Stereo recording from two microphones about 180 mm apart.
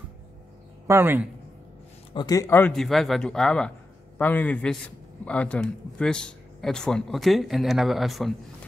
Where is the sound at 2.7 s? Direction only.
Centre (ahead or behind).